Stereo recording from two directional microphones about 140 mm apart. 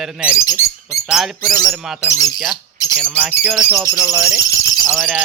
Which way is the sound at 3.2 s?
10° right (ahead or behind).